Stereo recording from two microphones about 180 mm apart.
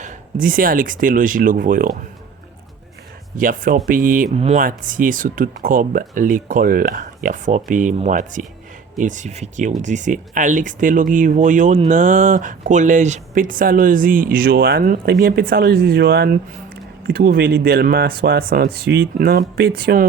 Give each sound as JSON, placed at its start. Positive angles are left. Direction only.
{"t": 0.0, "sound": "speech", "side_deg": -45}
{"t": 3.3, "sound": "speech", "side_deg": -50}
{"t": 4.4, "sound": "speech", "side_deg": -35}
{"t": 4.6, "sound": "speech", "side_deg": -50}